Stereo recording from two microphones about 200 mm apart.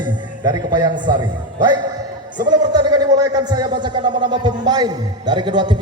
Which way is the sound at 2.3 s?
20° right (ahead or behind).